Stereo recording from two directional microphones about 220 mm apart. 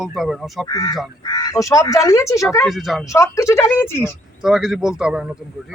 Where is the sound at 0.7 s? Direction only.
15° left (ahead or behind).